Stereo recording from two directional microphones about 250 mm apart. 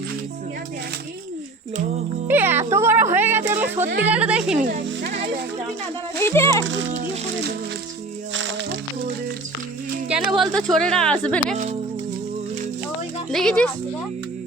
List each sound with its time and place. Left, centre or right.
2.2 s music: centre
4.0 s speech: centre
4.6 s speech: right
6.1 s speech: centre
6.7 s a child's voice: right
8.3 s music: right
10.3 s speech: centre
13.3 s speech: centre